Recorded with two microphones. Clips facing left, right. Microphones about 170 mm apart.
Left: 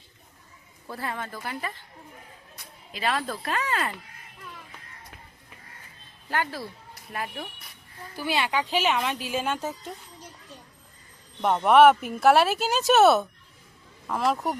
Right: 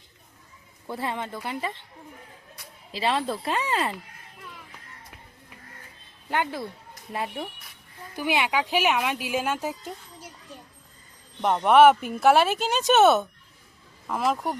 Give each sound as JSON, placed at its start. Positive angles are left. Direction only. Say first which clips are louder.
{"t": 0.9, "sound": "speech", "louder": "right 3 dB", "side_deg": -25}
{"t": 2.9, "sound": "speech", "louder": "right 3 dB", "side_deg": -25}
{"t": 6.2, "sound": "speech", "louder": "right 2 dB", "side_deg": -20}
{"t": 11.3, "sound": "speech", "louder": "even", "side_deg": 0}